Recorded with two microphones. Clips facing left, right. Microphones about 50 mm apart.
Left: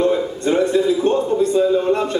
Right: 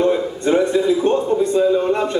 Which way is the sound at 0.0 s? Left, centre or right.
Centre.